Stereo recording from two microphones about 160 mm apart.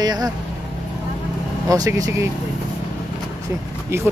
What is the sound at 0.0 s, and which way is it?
Vehicle, 25° right (ahead or behind).